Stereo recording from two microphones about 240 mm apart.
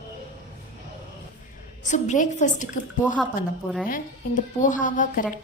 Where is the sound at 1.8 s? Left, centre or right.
Left.